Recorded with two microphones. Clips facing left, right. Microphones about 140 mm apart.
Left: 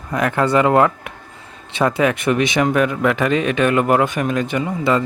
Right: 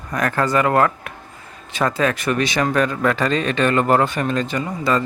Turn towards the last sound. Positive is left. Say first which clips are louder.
# left 2 dB
turn(degrees=20)  # may be behind; listen again after turning